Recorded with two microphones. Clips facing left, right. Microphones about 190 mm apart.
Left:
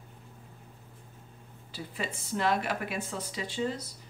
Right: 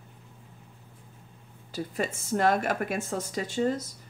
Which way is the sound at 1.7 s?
45° right (ahead or behind).